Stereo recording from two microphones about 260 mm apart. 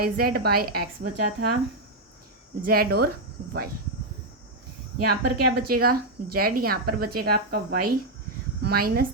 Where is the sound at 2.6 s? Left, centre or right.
Right.